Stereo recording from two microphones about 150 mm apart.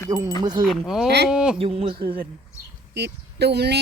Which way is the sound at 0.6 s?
Centre (ahead or behind).